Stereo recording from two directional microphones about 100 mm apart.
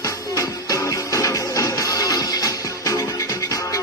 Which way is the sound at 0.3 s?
35° left (ahead or behind).